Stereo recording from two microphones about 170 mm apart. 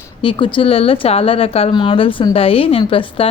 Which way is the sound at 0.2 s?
30° left (ahead or behind).